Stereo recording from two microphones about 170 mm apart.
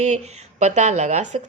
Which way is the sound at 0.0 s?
40° right (ahead or behind).